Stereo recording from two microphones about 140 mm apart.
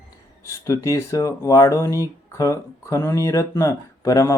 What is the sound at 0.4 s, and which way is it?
Speech, 20° left (ahead or behind).